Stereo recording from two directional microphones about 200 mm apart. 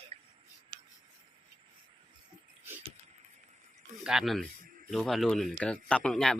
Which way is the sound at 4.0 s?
5° right (ahead or behind).